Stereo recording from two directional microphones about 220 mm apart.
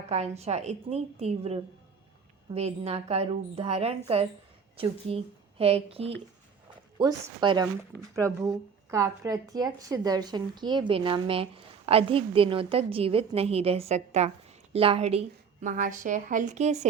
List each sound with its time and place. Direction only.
0.1 s a woman's voice: 30° right (ahead or behind)